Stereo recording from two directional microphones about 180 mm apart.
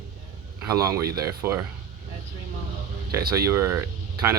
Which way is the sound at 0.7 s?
20° right (ahead or behind).